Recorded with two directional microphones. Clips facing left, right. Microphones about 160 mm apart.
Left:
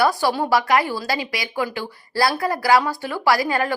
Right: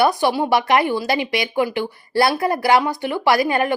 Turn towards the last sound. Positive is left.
turn(degrees=-20)  # may be behind; listen again after turning